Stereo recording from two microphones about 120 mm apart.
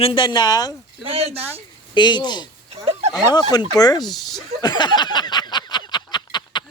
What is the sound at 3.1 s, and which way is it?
Speech, 35° left (ahead or behind).